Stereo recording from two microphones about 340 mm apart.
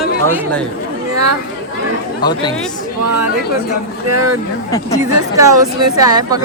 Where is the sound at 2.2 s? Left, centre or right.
Centre.